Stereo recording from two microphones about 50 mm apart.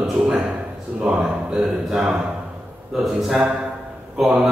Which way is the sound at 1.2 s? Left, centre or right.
Centre.